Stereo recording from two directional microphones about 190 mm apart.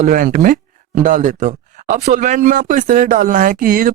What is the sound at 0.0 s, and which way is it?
Speech, 45° right (ahead or behind).